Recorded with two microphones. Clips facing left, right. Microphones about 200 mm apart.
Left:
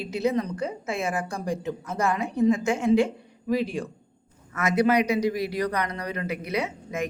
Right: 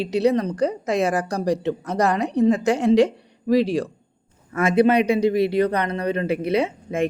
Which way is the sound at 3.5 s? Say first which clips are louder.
Right 7 dB; 80° right.